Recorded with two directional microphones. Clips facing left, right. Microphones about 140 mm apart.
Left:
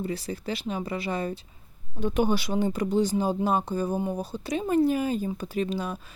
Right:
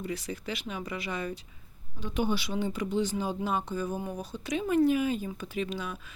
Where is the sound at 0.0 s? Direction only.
30° left (ahead or behind).